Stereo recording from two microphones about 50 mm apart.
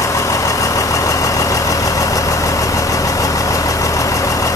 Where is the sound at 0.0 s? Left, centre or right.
Left.